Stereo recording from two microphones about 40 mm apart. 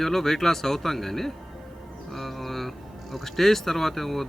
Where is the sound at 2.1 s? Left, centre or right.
Centre.